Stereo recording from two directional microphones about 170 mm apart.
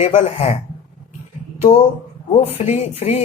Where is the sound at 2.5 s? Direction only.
35° left (ahead or behind).